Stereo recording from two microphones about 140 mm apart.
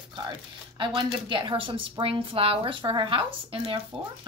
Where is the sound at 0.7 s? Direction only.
35° right (ahead or behind).